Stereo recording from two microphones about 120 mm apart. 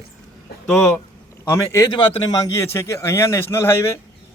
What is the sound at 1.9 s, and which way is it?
A man's voice, 40° left (ahead or behind).